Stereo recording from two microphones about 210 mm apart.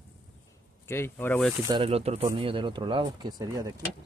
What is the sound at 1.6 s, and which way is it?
Speech, 25° right (ahead or behind).